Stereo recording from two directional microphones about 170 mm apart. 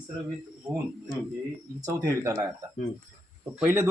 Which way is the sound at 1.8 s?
15° right (ahead or behind).